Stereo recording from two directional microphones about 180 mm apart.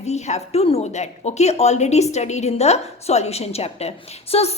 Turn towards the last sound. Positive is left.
turn(degrees=35)  # may be behind; listen again after turning